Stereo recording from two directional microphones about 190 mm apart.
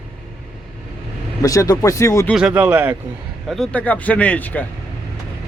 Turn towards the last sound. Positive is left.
turn(degrees=10)  # may be behind; listen again after turning